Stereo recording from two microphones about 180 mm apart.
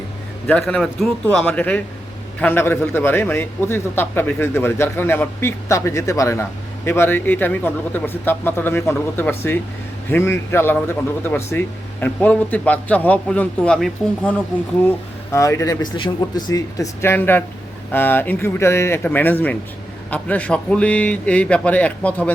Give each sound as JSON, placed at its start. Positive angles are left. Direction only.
{"t": 0.4, "sound": "a man's voice", "side_deg": 5}
{"t": 15.3, "sound": "a man's voice", "side_deg": 15}